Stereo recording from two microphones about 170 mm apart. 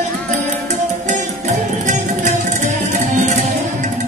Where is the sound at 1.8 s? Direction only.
45° right (ahead or behind).